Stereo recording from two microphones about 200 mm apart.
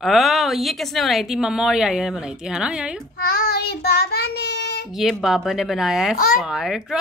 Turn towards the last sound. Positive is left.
turn(degrees=0)  # may be behind; listen again after turning